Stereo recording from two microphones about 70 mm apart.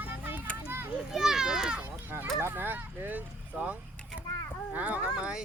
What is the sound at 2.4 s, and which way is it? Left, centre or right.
Speech, right.